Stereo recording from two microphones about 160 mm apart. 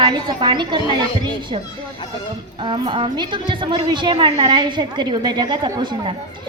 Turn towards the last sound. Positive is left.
turn(degrees=-30)  # may be behind; listen again after turning